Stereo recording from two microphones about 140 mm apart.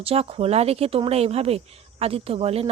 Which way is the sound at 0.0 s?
45° right (ahead or behind).